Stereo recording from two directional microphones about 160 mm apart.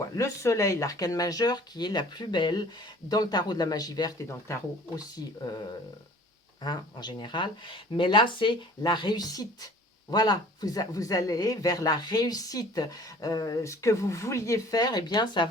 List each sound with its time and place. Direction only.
0.2 s speech: 20° left (ahead or behind)
6.6 s speech: 25° left (ahead or behind)